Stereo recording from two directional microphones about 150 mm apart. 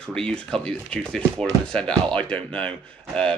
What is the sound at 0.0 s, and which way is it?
Speech, 5° left (ahead or behind).